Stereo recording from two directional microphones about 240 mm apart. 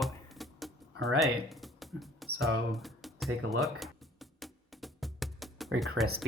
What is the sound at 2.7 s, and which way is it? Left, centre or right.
Music, centre.